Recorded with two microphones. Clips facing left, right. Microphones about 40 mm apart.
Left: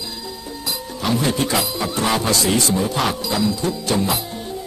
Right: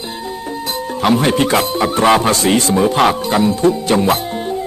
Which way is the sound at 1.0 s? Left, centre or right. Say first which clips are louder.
Right 7 dB; right.